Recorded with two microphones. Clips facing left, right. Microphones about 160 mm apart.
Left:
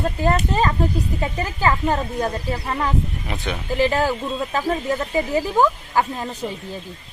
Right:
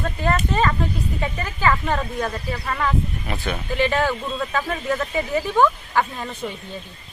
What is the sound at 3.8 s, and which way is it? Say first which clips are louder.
Speech: left 2 dB; 35° left (ahead or behind).